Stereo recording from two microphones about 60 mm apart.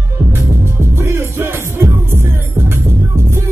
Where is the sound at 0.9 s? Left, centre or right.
Right.